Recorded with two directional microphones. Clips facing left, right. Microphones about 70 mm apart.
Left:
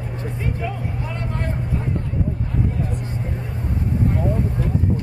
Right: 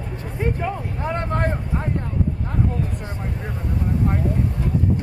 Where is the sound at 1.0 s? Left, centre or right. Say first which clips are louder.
Right 8 dB; right.